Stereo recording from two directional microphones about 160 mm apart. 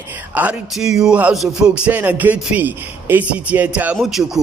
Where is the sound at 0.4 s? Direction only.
5° right (ahead or behind).